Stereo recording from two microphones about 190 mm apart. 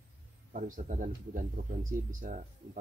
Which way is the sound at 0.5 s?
45° right (ahead or behind).